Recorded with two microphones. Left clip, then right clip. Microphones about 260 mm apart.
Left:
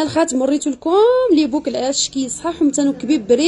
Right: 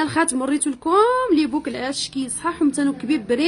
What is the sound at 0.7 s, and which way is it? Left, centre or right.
Speech, right.